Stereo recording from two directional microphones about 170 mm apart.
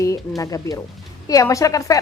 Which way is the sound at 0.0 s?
20° left (ahead or behind).